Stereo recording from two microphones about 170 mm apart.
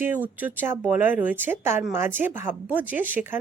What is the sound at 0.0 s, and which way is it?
Speech, 10° right (ahead or behind).